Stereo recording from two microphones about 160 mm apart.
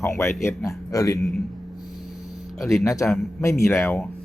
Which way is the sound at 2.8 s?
20° left (ahead or behind).